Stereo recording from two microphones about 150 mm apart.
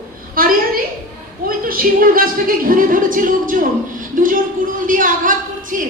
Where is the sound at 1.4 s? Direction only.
70° right (ahead or behind).